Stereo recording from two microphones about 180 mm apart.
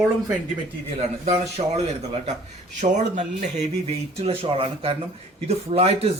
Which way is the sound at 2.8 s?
40° right (ahead or behind).